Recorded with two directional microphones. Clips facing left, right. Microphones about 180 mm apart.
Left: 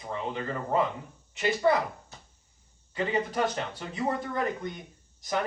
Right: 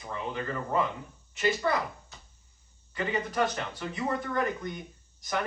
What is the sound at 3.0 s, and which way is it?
Speech, 25° left (ahead or behind).